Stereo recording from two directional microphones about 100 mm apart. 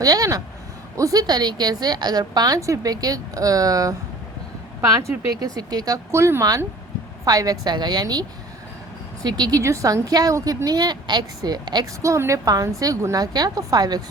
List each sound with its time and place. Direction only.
0.0 s a sound: 35° right (ahead or behind)
0.9 s a woman's voice: 35° right (ahead or behind)
4.9 s a woman's voice: 35° right (ahead or behind)
6.1 s a woman's voice: 30° right (ahead or behind); by 11.9 s 45° right (ahead or behind)
12.0 s a woman's voice: 30° right (ahead or behind)